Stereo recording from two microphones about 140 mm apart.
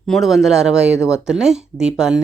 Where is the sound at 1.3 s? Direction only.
5° right (ahead or behind).